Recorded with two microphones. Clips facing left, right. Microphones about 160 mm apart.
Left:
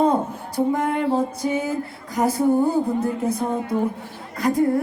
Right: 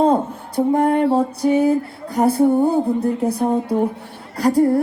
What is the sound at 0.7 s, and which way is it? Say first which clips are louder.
Speech: right 8 dB; 35° right (ahead or behind).